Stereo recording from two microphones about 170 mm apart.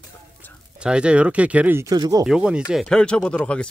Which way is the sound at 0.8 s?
5° right (ahead or behind).